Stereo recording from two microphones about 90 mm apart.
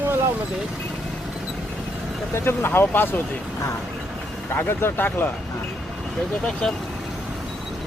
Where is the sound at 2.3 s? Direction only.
25° left (ahead or behind).